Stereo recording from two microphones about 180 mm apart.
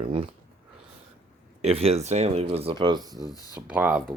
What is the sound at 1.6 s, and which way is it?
Speech, 35° right (ahead or behind).